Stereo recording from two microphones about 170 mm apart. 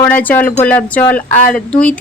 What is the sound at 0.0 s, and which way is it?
Speech, 10° left (ahead or behind).